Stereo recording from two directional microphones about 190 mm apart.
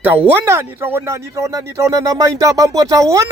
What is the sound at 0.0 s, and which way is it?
Speech, 10° right (ahead or behind).